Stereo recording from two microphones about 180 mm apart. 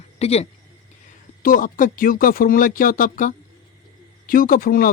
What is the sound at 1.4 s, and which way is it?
Speech, 50° left (ahead or behind).